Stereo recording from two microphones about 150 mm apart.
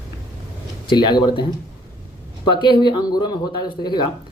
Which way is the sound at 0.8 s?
30° left (ahead or behind).